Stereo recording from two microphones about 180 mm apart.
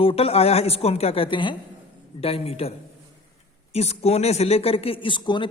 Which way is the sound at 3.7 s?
35° left (ahead or behind).